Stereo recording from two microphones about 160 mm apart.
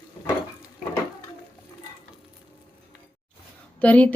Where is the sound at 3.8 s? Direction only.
10° left (ahead or behind).